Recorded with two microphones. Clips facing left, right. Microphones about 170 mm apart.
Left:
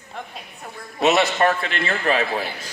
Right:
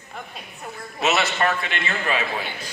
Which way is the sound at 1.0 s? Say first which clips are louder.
Left 4 dB; 35° left (ahead or behind).